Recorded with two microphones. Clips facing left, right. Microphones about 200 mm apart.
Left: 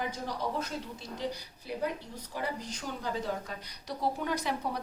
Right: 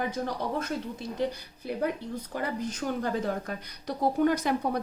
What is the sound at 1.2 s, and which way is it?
A woman's voice, 55° right (ahead or behind).